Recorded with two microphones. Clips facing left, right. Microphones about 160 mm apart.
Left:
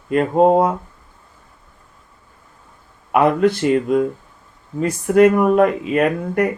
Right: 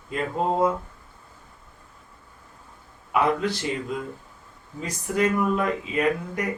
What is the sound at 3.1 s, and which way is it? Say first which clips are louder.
Speech: left 8 dB; 60° left (ahead or behind).